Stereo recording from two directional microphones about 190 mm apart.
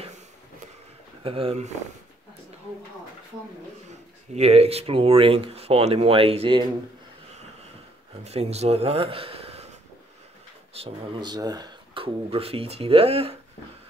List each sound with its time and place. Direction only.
1.2 s speech: 30° right (ahead or behind)
3.9 s speech: 35° right (ahead or behind)
8.2 s speech: 35° right (ahead or behind)
10.7 s speech: 25° right (ahead or behind)